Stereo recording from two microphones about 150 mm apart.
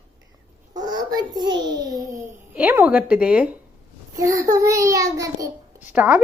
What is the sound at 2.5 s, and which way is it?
Speech, 10° right (ahead or behind).